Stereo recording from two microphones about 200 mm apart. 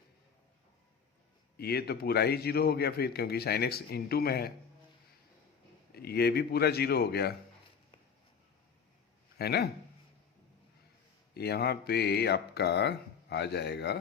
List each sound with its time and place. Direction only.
1.5 s a man's voice: 50° left (ahead or behind)
5.9 s a man's voice: 50° left (ahead or behind)
9.4 s speech: 55° left (ahead or behind)
11.3 s speech: 55° left (ahead or behind)